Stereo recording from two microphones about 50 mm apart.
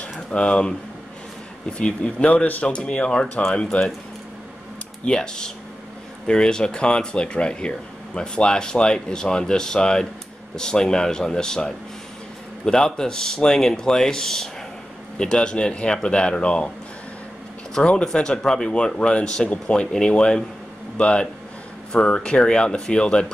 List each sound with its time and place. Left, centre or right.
0.0 s speech: left
5.0 s speech: centre
17.8 s speech: centre